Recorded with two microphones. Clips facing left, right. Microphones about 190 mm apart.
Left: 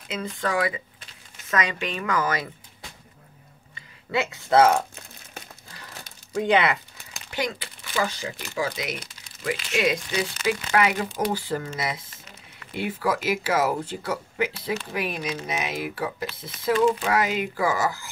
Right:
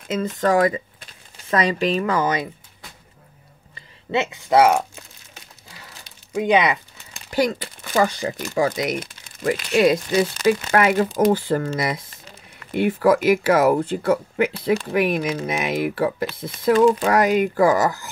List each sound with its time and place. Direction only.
0.1 s speech: 45° right (ahead or behind)
1.5 s a woman's voice: 35° right (ahead or behind)
4.1 s speech: 20° right (ahead or behind)
6.3 s speech: 15° right (ahead or behind)
7.2 s speech: 40° right (ahead or behind)
10.7 s speech: 50° right (ahead or behind)
12.7 s speech: 55° right (ahead or behind)